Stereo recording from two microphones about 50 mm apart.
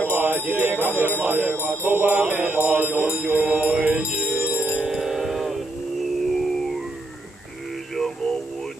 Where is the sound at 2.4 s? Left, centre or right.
Right.